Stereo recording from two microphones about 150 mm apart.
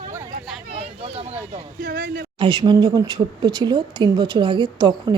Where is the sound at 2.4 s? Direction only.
30° right (ahead or behind).